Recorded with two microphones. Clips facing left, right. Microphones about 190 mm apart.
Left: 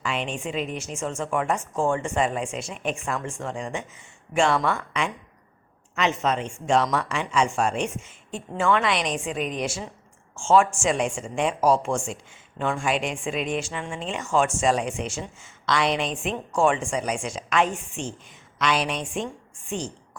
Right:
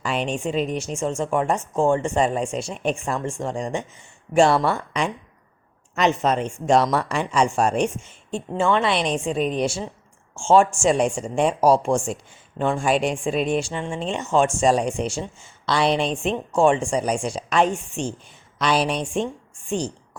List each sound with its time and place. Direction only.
0.0 s speech: 35° right (ahead or behind)
8.3 s speech: 25° right (ahead or behind)